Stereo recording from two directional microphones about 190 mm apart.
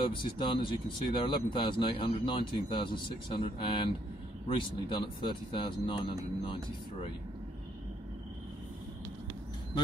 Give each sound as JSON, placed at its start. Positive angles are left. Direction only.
{"t": 0.0, "sound": "speech", "side_deg": 25}